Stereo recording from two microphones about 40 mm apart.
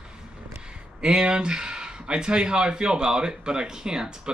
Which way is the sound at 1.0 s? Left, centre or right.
Right.